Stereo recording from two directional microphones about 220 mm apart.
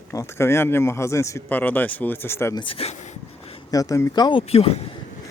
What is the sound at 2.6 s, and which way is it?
Speech, 25° left (ahead or behind).